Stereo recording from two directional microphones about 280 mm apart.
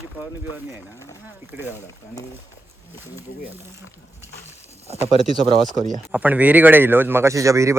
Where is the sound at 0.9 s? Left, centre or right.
Centre.